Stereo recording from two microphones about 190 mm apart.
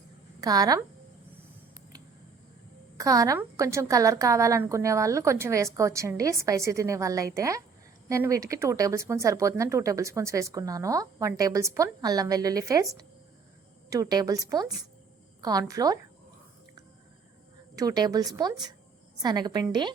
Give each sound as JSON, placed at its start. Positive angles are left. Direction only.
{"t": 0.4, "sound": "a woman's voice", "side_deg": -20}
{"t": 3.0, "sound": "a woman's voice", "side_deg": -15}
{"t": 17.7, "sound": "a woman's voice", "side_deg": -20}